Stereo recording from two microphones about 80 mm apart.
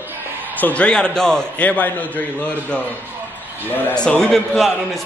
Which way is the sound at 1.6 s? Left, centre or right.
Centre.